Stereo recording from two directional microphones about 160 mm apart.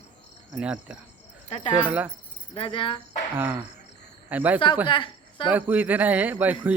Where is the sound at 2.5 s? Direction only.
35° left (ahead or behind).